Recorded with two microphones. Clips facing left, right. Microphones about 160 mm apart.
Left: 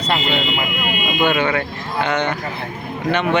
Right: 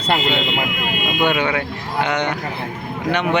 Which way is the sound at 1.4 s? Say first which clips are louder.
Left 1 dB; 15° right (ahead or behind).